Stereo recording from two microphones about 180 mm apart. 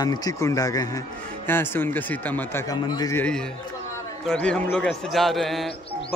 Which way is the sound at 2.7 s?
20° left (ahead or behind).